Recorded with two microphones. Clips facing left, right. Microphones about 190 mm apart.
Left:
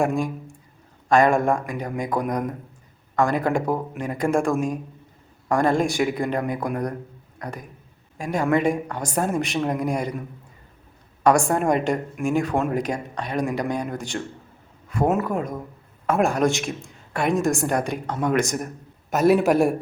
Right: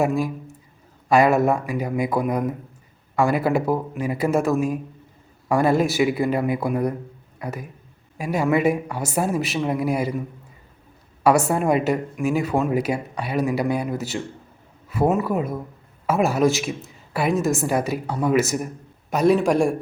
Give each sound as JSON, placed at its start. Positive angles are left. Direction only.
{"t": 0.0, "sound": "a man's voice", "side_deg": -5}
{"t": 11.2, "sound": "speech", "side_deg": -5}